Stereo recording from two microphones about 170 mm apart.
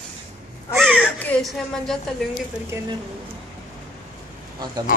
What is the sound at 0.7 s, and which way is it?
Speech, centre (ahead or behind).